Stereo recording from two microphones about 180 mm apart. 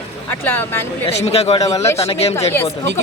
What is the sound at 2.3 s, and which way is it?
Speech, 15° left (ahead or behind).